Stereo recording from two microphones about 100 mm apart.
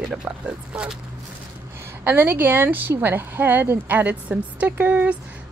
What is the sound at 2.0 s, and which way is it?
Speech, 20° right (ahead or behind).